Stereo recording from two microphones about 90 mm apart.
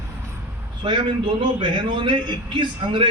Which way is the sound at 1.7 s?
65° right (ahead or behind).